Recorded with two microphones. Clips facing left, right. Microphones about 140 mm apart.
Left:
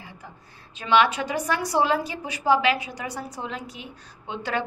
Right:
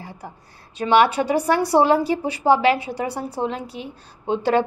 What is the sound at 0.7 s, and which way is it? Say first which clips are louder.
A woman's voice: right 4 dB; 35° right (ahead or behind).